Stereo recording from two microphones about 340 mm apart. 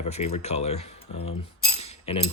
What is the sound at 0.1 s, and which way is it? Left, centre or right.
Speech, centre.